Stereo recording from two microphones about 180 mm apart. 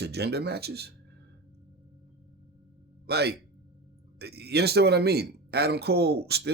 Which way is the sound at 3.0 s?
65° right (ahead or behind).